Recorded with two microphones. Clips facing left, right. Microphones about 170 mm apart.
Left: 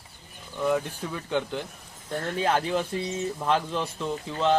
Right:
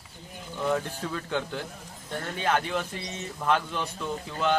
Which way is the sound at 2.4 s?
30° left (ahead or behind).